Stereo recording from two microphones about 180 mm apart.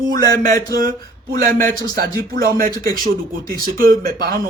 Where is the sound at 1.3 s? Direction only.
55° right (ahead or behind).